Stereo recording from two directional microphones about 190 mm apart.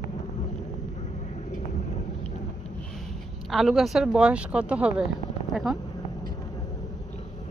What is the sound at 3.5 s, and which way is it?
Speech, centre (ahead or behind).